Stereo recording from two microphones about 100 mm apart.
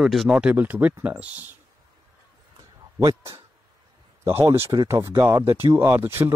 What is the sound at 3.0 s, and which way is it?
Speech, 40° right (ahead or behind).